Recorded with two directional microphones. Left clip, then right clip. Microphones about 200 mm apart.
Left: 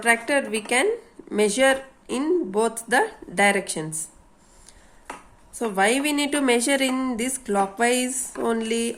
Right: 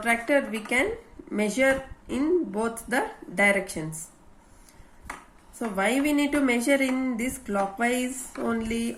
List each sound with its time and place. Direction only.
0.0 s a woman's voice: 50° left (ahead or behind)
5.5 s a woman's voice: 50° left (ahead or behind)